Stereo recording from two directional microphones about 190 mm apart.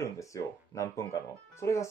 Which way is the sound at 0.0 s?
15° left (ahead or behind).